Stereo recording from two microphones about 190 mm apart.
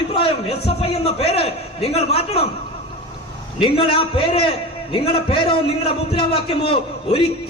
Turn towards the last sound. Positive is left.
turn(degrees=30)  # may be behind; listen again after turning